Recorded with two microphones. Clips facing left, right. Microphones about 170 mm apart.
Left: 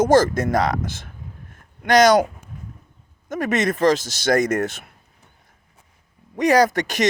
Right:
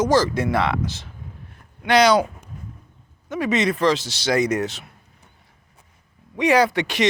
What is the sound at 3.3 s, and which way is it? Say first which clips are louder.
Speech: even; 50° left (ahead or behind).